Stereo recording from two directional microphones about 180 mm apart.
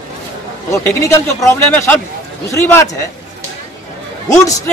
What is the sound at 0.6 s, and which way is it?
A man's voice, 15° left (ahead or behind).